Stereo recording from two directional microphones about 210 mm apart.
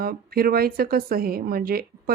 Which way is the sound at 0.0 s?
45° right (ahead or behind).